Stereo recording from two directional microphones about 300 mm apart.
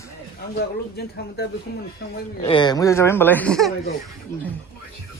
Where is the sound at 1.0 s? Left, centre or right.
Left.